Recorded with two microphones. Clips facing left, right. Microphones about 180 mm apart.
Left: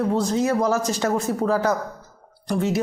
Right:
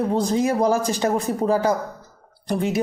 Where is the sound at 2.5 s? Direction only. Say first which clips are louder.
Even; 15° right (ahead or behind).